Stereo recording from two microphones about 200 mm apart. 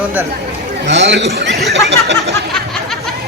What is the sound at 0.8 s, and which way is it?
Speech, 60° right (ahead or behind).